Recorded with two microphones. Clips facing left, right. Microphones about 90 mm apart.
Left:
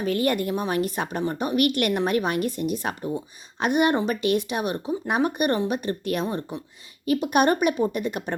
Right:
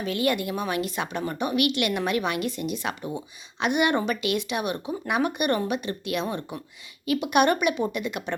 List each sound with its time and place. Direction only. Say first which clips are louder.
0.0 s speech: left 2 dB; 40° left (ahead or behind)